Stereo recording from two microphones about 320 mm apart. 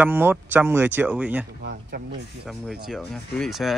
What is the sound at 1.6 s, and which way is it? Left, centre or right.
Speech, right.